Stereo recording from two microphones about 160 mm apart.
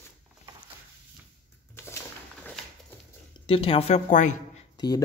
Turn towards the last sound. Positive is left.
turn(degrees=25)  # may be behind; listen again after turning